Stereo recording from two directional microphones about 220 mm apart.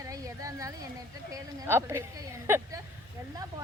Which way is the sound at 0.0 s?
15° right (ahead or behind).